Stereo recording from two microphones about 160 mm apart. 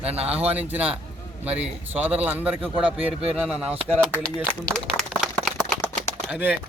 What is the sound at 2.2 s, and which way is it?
Speech, 10° right (ahead or behind).